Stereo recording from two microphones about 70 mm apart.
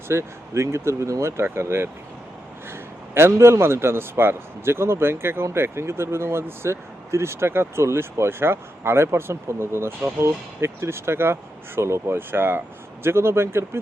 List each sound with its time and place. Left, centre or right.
0.1 s speech: right
3.2 s speech: right